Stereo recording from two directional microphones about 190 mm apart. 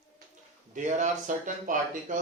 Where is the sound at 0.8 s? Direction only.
40° right (ahead or behind).